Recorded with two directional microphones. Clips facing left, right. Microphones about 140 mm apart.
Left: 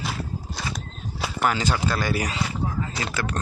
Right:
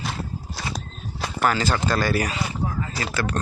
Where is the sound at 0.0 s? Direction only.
Centre (ahead or behind).